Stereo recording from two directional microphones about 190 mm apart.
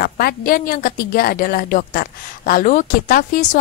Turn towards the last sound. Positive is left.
turn(degrees=45)  # may be behind; listen again after turning